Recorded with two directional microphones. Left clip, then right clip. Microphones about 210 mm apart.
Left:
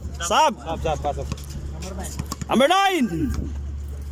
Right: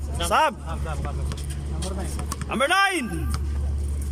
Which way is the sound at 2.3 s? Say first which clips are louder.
Left 4 dB; 20° left (ahead or behind).